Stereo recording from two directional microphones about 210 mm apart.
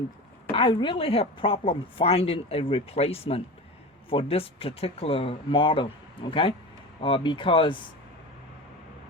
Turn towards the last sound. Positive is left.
turn(degrees=25)  # may be behind; listen again after turning